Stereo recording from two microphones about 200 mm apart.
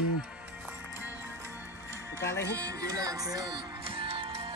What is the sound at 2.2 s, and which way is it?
Speech, 15° left (ahead or behind).